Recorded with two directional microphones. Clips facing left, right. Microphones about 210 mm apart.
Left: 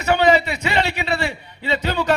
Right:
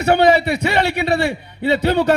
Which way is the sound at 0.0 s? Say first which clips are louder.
Right 3 dB; 55° right (ahead or behind).